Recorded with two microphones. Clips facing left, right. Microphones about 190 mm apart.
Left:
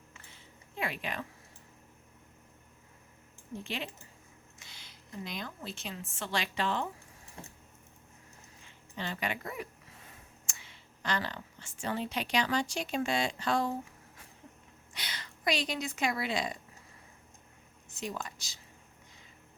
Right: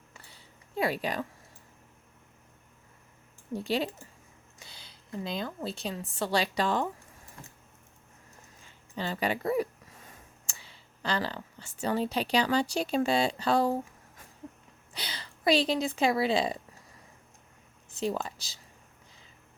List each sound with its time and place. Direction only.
0.1 s a sound: 35° right (ahead or behind)
3.5 s a woman's voice: 35° right (ahead or behind)
4.6 s a sound: 30° right (ahead or behind)
5.6 s a woman's voice: 35° right (ahead or behind)
9.0 s a woman's voice: 35° right (ahead or behind)
14.9 s a woman's voice: 30° right (ahead or behind)
17.9 s speech: 30° right (ahead or behind)